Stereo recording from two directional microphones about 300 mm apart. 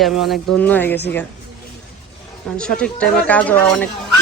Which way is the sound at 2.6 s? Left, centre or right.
Centre.